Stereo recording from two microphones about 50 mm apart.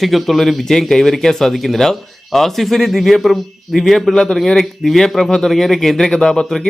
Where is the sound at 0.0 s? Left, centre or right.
Centre.